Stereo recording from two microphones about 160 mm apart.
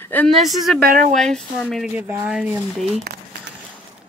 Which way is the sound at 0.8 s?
55° right (ahead or behind).